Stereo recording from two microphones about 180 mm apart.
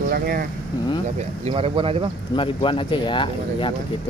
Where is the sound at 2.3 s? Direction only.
30° left (ahead or behind).